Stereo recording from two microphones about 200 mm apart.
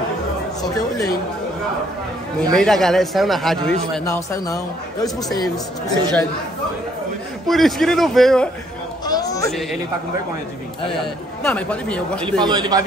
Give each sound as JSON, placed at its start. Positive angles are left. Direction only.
{"t": 0.6, "sound": "speech", "side_deg": 20}
{"t": 2.5, "sound": "speech", "side_deg": 0}
{"t": 4.1, "sound": "speech", "side_deg": 15}
{"t": 7.4, "sound": "speech", "side_deg": 0}
{"t": 9.0, "sound": "a sound", "side_deg": 20}
{"t": 9.5, "sound": "speech", "side_deg": 0}
{"t": 11.4, "sound": "speech", "side_deg": 5}
{"t": 12.4, "sound": "a man's voice", "side_deg": -20}